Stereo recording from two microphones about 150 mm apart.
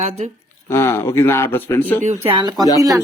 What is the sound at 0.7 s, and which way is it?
A man's voice, 15° left (ahead or behind).